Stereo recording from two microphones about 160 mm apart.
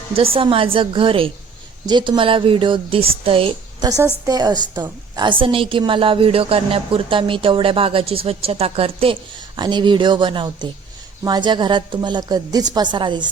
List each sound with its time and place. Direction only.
0.2 s a woman's voice: 35° right (ahead or behind)
3.8 s a woman's voice: 20° right (ahead or behind)